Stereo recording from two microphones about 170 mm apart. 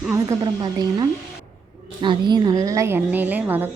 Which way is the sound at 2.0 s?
25° right (ahead or behind).